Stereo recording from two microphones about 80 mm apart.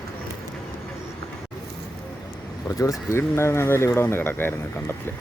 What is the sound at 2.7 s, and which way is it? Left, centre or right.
Speech, left.